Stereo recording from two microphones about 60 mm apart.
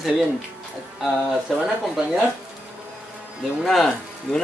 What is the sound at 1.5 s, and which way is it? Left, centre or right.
Speech, centre.